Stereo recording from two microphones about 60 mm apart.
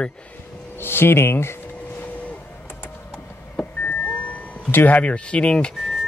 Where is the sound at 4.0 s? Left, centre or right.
Left.